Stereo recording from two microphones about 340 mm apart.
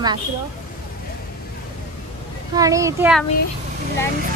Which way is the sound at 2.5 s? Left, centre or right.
Centre.